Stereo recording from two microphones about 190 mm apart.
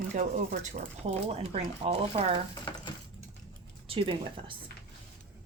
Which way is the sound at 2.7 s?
25° left (ahead or behind).